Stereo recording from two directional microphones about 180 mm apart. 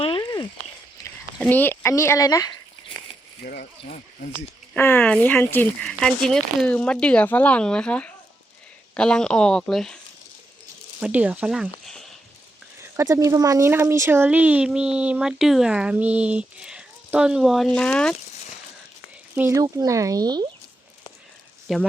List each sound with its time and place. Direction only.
0.0 s a sound: 25° left (ahead or behind)
1.4 s speech: 10° left (ahead or behind)
3.4 s speech: 55° left (ahead or behind)
4.7 s speech: 10° left (ahead or behind)
11.0 s speech: 10° right (ahead or behind)
12.8 s speech: 15° right (ahead or behind); by 18.2 s 5° left (ahead or behind)
19.3 s speech: 10° right (ahead or behind)
21.7 s speech: centre (ahead or behind)